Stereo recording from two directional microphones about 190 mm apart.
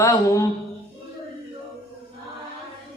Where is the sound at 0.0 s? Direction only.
15° left (ahead or behind).